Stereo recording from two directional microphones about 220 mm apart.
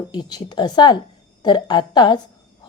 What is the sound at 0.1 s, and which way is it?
A woman's voice, 20° left (ahead or behind).